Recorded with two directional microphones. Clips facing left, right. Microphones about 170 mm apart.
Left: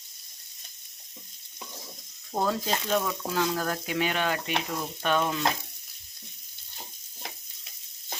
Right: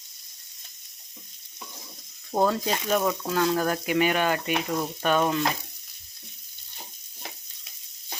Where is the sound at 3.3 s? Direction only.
5° right (ahead or behind).